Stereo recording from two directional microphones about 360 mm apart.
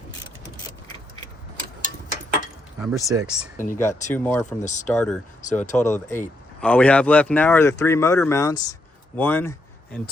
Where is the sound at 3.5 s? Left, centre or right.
Left.